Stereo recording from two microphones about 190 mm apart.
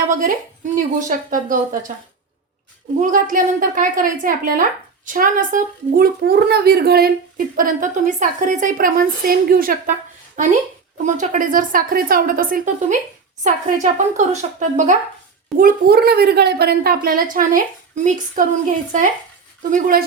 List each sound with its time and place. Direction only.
0.1 s speech: 40° right (ahead or behind)
3.0 s a woman's voice: 45° right (ahead or behind)